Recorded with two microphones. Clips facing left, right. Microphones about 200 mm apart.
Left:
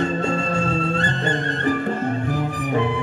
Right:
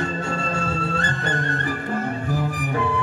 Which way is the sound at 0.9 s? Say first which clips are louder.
Left 3 dB; 20° left (ahead or behind).